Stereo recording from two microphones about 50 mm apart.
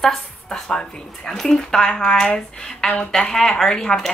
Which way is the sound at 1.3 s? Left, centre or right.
Centre.